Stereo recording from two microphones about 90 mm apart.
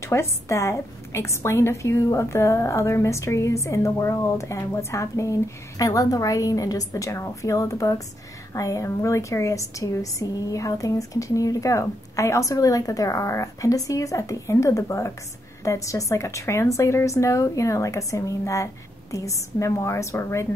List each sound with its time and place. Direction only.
0.0 s a woman's voice: 30° left (ahead or behind)